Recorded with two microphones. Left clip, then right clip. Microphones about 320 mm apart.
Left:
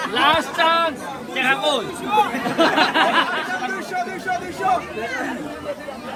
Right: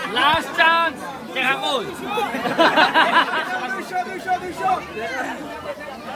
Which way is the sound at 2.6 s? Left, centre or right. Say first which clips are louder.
Right 2 dB; right.